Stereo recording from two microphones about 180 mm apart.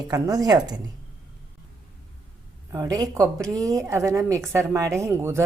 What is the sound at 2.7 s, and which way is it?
A woman's voice, 20° right (ahead or behind).